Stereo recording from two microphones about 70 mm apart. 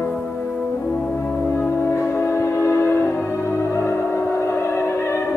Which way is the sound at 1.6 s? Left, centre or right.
Left.